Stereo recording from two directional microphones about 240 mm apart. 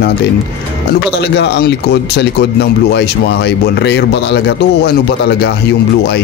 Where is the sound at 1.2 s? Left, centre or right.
Left.